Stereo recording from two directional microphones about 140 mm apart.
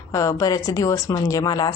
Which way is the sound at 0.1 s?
25° left (ahead or behind).